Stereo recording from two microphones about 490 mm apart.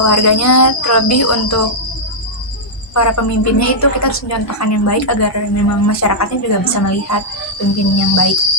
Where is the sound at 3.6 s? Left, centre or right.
Left.